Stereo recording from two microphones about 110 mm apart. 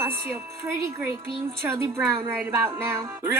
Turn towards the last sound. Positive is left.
turn(degrees=-25)  # may be behind; listen again after turning